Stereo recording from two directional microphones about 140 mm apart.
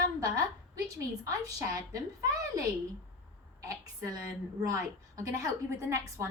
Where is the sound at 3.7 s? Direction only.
25° right (ahead or behind).